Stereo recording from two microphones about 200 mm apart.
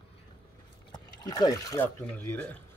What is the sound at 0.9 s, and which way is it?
Speech, 20° left (ahead or behind).